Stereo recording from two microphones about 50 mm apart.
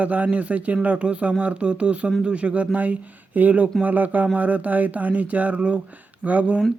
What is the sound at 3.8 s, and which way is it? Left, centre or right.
Speech, right.